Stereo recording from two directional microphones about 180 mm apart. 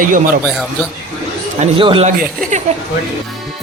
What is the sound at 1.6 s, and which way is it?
Speech, 30° right (ahead or behind).